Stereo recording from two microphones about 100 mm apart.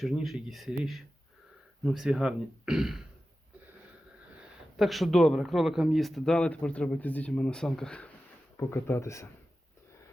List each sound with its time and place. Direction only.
0.0 s speech: centre (ahead or behind)
4.8 s speech: centre (ahead or behind)
8.5 s speech: 25° left (ahead or behind)